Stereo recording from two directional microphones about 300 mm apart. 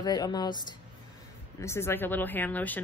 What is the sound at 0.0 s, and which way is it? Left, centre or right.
Speech, centre.